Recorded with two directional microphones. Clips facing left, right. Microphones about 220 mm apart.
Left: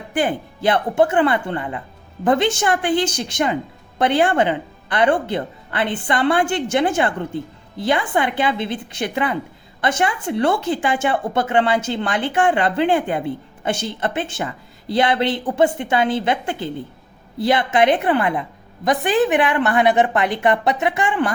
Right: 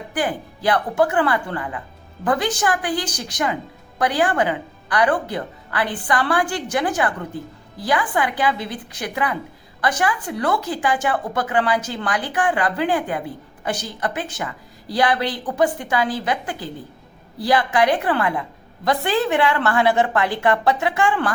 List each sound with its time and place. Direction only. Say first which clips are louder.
0.1 s a woman's voice: left 4 dB; 25° left (ahead or behind)